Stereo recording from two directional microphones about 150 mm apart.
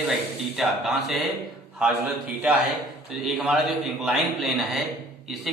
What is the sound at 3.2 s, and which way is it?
A man's voice, 5° right (ahead or behind).